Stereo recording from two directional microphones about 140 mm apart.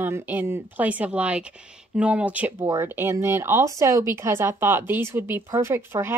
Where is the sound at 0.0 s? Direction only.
15° right (ahead or behind).